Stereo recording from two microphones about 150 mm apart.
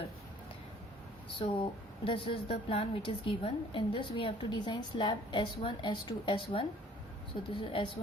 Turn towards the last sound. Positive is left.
turn(degrees=35)  # may be behind; listen again after turning